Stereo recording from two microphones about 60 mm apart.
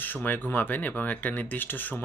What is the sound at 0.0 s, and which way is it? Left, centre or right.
Speech, left.